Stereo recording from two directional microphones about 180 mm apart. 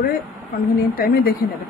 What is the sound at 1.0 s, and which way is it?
Speech, 55° left (ahead or behind).